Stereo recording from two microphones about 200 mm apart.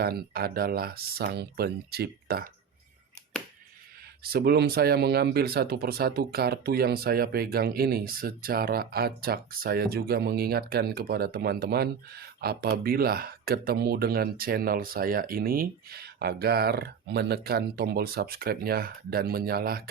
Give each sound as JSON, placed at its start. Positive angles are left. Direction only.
{"t": 0.0, "sound": "speech", "side_deg": -50}
{"t": 4.2, "sound": "speech", "side_deg": -50}